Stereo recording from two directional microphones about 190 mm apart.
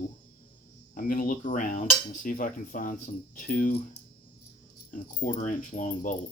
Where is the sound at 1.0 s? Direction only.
45° left (ahead or behind).